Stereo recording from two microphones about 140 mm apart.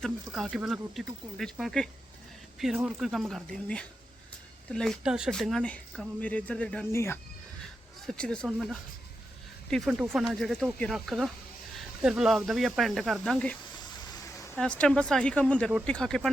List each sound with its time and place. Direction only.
0.0 s speech: centre (ahead or behind)
6.9 s speech: 20° left (ahead or behind)
8.0 s speech: 5° left (ahead or behind)
9.6 s speech: 5° left (ahead or behind)